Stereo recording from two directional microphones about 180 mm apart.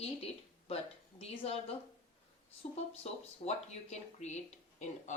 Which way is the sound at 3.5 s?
40° left (ahead or behind).